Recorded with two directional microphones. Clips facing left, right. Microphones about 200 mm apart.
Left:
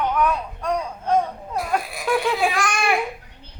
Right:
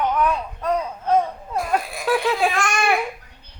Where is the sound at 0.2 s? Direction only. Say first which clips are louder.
Even; 5° right (ahead or behind).